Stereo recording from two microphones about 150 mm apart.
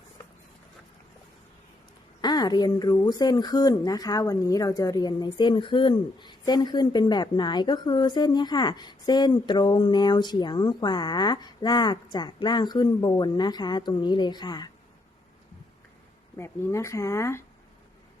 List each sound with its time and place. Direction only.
2.2 s speech: 25° left (ahead or behind)
16.4 s speech: 20° left (ahead or behind)